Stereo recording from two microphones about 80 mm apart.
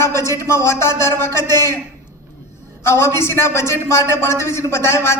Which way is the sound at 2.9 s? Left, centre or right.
Left.